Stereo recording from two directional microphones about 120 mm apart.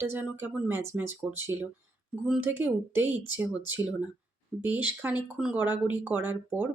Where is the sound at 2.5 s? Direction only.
15° right (ahead or behind).